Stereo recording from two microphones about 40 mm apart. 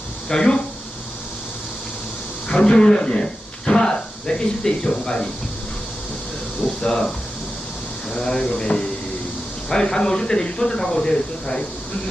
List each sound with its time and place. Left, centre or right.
0.3 s speech: centre
2.5 s speech: left
3.7 s a sound: centre
6.6 s speech: centre
8.1 s speech: centre